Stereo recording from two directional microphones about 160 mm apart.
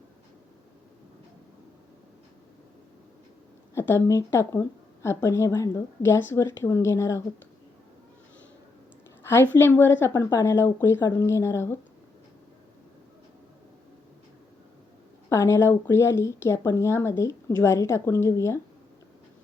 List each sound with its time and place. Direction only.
3.8 s speech: 15° left (ahead or behind)
9.2 s speech: 15° left (ahead or behind)
15.3 s speech: 15° left (ahead or behind)